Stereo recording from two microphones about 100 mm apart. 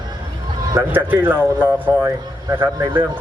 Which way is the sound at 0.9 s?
20° right (ahead or behind).